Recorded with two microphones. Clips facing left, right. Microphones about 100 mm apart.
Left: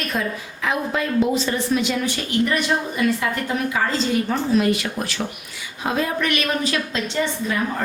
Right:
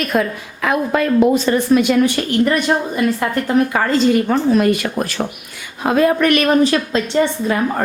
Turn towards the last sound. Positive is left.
turn(degrees=-50)  # may be behind; listen again after turning